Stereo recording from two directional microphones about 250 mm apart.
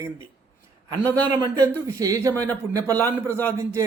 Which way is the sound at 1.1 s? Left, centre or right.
Centre.